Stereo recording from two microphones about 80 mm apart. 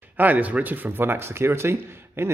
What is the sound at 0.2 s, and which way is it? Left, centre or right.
Speech, right.